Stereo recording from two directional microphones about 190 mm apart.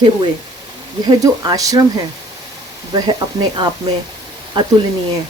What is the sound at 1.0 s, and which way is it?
Speech, 20° right (ahead or behind).